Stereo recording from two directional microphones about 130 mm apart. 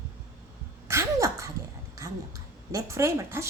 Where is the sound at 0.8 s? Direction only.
20° right (ahead or behind).